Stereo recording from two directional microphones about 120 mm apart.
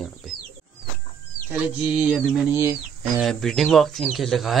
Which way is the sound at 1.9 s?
10° right (ahead or behind).